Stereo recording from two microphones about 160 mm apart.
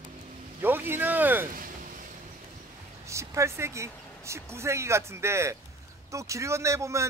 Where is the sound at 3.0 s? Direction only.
20° right (ahead or behind).